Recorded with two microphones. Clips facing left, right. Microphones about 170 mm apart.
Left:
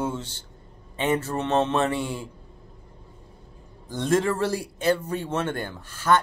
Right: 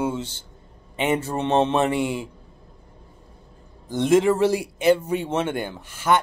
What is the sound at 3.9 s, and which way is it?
Speech, 15° right (ahead or behind).